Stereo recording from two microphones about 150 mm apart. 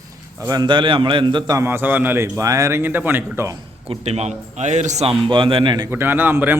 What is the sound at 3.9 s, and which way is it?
A man's voice, 45° right (ahead or behind).